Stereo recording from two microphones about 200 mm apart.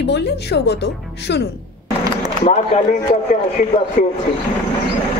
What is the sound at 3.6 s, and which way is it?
Speech, 40° left (ahead or behind).